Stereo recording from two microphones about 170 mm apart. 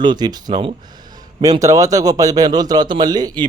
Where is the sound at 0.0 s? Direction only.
25° right (ahead or behind).